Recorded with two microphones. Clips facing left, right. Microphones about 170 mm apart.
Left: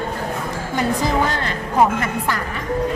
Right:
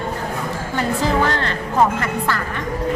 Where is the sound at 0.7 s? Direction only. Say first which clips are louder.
Even; 15° left (ahead or behind).